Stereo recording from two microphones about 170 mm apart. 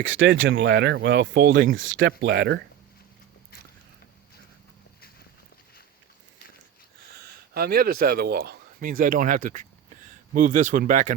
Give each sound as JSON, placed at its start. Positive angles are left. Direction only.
{"t": 0.1, "sound": "speech", "side_deg": -90}
{"t": 2.0, "sound": "speech", "side_deg": -85}
{"t": 7.2, "sound": "speech", "side_deg": -70}